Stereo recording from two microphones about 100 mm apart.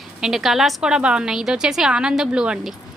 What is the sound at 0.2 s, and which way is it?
A woman's voice, 5° right (ahead or behind).